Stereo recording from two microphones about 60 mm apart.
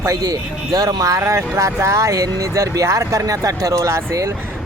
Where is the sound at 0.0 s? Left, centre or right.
Right.